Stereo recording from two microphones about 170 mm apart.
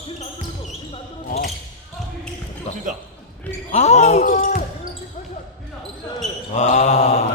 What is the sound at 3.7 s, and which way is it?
Speech, 40° left (ahead or behind).